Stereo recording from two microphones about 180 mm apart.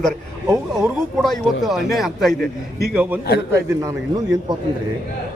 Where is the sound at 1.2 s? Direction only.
Centre (ahead or behind).